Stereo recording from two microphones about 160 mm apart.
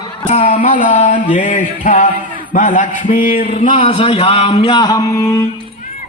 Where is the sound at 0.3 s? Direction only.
50° left (ahead or behind).